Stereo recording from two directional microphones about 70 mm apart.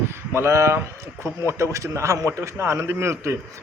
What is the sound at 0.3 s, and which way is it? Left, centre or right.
A man's voice, right.